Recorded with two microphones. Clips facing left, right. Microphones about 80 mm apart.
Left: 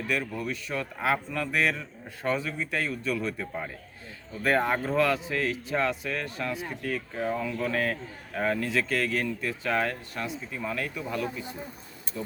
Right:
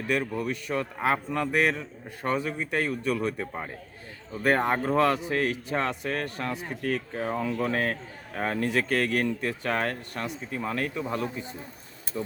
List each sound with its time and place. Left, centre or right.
0.1 s speech: right
4.4 s speech: right